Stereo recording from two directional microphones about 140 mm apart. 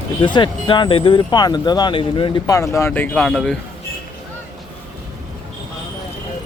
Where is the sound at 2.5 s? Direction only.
20° left (ahead or behind); by 3.6 s 5° left (ahead or behind).